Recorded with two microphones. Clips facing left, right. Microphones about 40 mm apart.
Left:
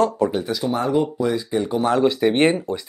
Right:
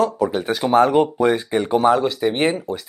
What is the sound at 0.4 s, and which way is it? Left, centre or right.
Speech, right.